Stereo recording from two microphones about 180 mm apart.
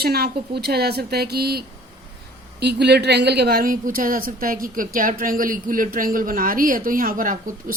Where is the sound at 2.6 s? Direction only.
65° right (ahead or behind).